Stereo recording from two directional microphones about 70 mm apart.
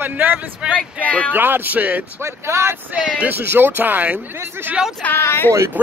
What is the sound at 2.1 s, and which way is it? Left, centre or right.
Speech, right.